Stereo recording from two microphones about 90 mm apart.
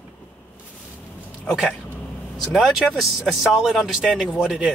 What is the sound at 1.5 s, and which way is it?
Speech, 5° left (ahead or behind).